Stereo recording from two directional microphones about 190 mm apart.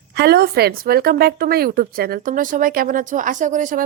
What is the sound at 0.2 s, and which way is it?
Speech, 55° right (ahead or behind).